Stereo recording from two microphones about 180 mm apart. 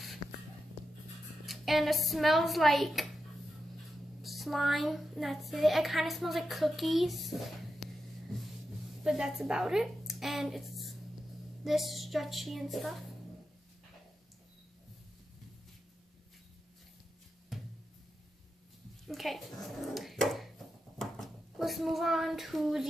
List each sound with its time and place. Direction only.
1.4 s speech: centre (ahead or behind)
4.2 s a woman's voice: centre (ahead or behind)
9.0 s a woman's voice: 5° right (ahead or behind)
17.5 s music: centre (ahead or behind)
19.0 s dog: centre (ahead or behind)
21.0 s speech: centre (ahead or behind)